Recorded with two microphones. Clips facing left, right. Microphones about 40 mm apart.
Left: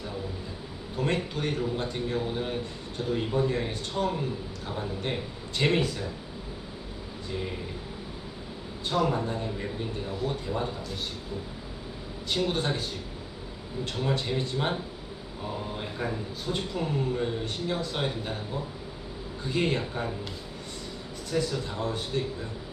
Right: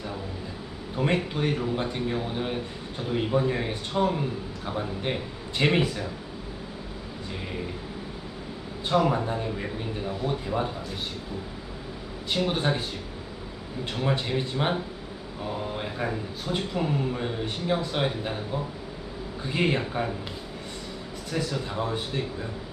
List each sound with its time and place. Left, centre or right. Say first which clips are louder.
0.9 s a man's voice: right 3 dB; right
8.9 s a man's voice: right 3 dB; right
12.3 s a man's voice: right 2 dB; centre
14.0 s a man's voice: right 2 dB; right
15.8 s a man's voice: right 2 dB; centre
19.5 s a man's voice: right 2 dB; right
21.3 s a man's voice: even; centre